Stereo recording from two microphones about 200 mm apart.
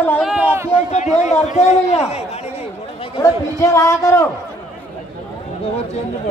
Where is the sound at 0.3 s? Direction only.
10° right (ahead or behind).